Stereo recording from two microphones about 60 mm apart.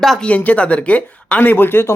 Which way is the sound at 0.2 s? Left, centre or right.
Left.